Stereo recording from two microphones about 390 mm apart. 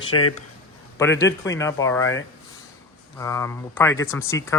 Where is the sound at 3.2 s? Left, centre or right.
Centre.